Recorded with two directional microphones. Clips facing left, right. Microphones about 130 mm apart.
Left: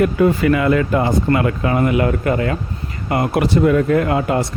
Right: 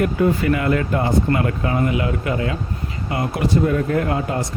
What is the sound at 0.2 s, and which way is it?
Speech, 90° left.